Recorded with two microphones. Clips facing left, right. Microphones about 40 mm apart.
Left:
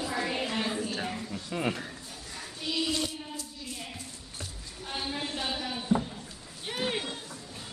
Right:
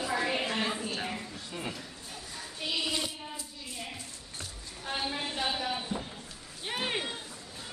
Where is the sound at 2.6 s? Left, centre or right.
Centre.